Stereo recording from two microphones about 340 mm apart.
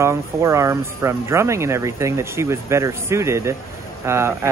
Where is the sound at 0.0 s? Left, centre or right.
Centre.